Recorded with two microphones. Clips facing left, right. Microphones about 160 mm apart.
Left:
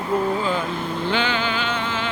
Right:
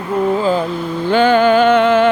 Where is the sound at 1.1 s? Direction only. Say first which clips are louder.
Right 14 dB; 45° right (ahead or behind).